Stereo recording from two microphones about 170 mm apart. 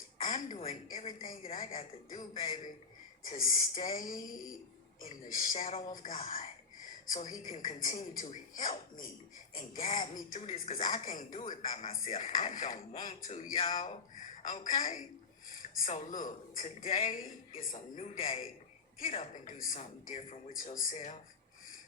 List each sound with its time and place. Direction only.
0.2 s a sound: 50° left (ahead or behind)
0.6 s a woman's voice: 55° left (ahead or behind)
19.5 s speech: 50° left (ahead or behind)